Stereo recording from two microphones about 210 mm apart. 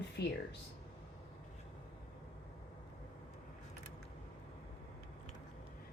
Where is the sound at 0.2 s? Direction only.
55° left (ahead or behind).